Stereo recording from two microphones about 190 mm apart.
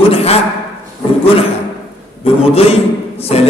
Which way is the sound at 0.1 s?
30° left (ahead or behind).